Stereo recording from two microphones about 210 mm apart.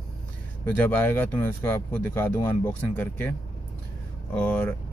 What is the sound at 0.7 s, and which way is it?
Speech, 10° left (ahead or behind).